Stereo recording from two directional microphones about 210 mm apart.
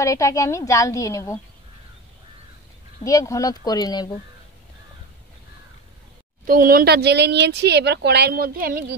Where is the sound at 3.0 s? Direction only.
15° left (ahead or behind).